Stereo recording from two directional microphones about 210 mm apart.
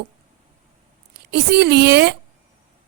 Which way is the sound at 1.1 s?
50° right (ahead or behind).